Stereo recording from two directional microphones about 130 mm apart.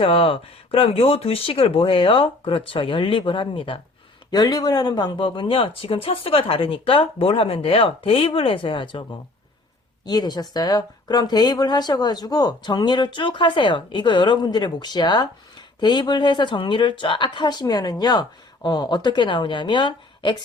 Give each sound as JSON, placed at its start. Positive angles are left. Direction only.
{"t": 0.0, "sound": "speech", "side_deg": 45}
{"t": 4.3, "sound": "speech", "side_deg": 30}
{"t": 10.1, "sound": "speech", "side_deg": 30}